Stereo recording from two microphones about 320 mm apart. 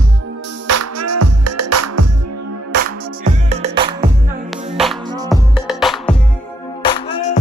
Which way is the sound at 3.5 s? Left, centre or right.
Centre.